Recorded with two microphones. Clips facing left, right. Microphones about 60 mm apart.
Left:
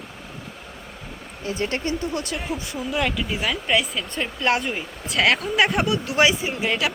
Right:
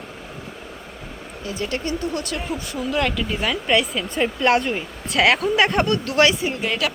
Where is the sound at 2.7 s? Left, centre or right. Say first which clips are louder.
Right 3 dB; centre.